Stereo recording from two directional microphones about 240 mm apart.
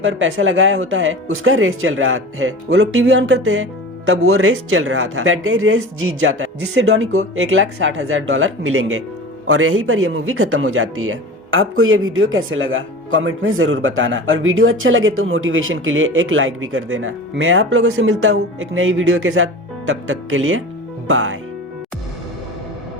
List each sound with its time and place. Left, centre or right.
0.0 s speech: right